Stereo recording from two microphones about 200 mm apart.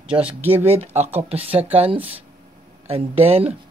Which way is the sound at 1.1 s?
30° right (ahead or behind).